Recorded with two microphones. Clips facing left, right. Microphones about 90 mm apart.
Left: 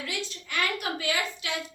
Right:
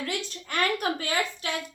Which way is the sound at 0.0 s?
45° right (ahead or behind).